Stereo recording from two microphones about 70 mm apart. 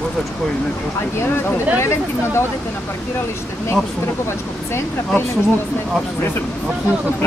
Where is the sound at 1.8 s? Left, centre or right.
Left.